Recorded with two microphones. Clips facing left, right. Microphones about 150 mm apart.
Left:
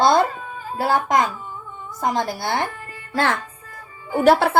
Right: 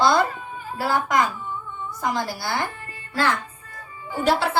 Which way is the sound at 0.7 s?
25° left (ahead or behind).